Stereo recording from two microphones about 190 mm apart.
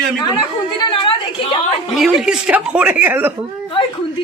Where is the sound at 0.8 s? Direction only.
25° left (ahead or behind).